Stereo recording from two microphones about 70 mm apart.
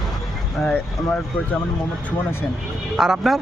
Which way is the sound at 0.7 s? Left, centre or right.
Left.